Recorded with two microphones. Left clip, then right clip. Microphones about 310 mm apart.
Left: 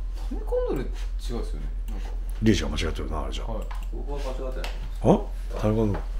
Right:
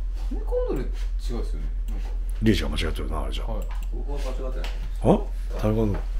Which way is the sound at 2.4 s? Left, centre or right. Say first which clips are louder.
Even; centre.